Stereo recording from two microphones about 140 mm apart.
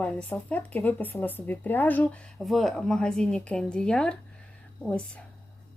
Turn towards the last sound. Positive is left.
turn(degrees=5)  # may be behind; listen again after turning